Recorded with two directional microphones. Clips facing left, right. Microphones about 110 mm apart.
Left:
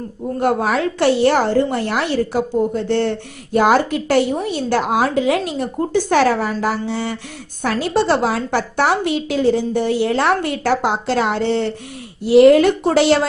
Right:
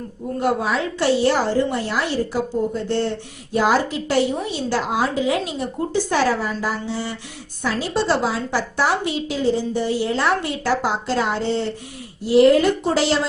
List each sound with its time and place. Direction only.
0.3 s a woman's voice: 50° left (ahead or behind)
0.7 s a woman's voice: 60° left (ahead or behind)
3.5 s a woman's voice: 55° left (ahead or behind)